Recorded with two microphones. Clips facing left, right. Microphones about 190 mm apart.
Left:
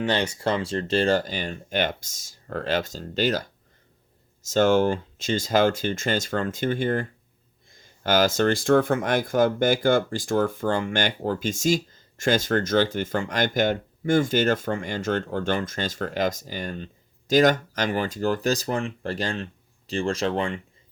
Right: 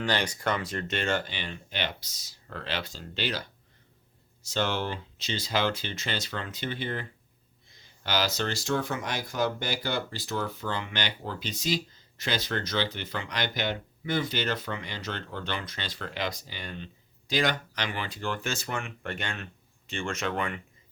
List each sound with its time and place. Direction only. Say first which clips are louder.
0.0 s speech: left 5 dB; 25° left (ahead or behind)